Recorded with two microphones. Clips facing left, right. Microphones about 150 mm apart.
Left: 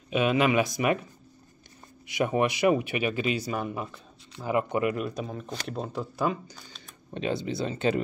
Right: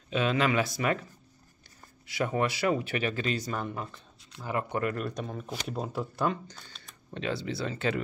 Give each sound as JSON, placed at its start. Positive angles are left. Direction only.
{"t": 0.1, "sound": "speech", "side_deg": 15}
{"t": 2.0, "sound": "speech", "side_deg": 15}
{"t": 7.2, "sound": "speech", "side_deg": 20}